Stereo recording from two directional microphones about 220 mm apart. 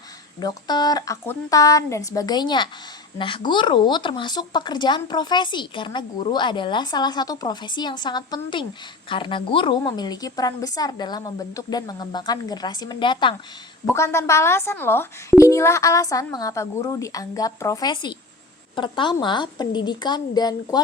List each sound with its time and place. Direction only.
0.3 s speech: 20° left (ahead or behind)